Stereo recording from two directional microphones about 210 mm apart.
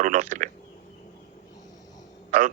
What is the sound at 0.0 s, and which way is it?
Speech, 40° right (ahead or behind).